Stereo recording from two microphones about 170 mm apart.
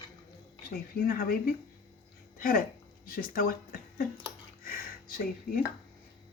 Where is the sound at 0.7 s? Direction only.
60° left (ahead or behind).